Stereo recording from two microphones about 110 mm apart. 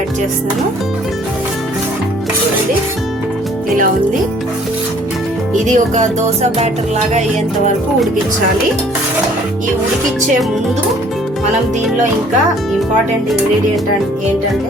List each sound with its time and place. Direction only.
5.5 s music: 90° right